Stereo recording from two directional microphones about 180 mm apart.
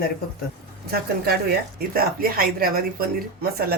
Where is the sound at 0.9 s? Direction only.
60° right (ahead or behind).